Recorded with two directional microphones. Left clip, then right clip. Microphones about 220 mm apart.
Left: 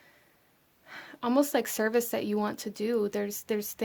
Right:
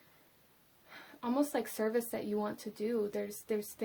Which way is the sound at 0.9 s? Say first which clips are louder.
Left 7 dB; 40° left (ahead or behind).